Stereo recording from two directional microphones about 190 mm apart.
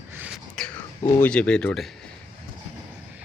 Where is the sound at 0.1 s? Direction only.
10° right (ahead or behind).